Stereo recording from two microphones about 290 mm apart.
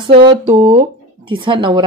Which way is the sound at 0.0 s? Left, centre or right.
Centre.